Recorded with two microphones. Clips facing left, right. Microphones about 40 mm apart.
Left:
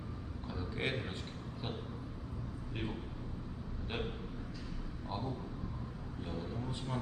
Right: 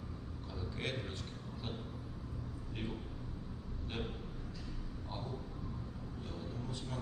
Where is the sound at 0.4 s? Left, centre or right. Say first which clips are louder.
Left 4 dB; centre.